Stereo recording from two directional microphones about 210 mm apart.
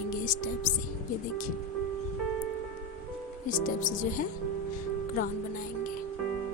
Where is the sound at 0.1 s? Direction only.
40° left (ahead or behind).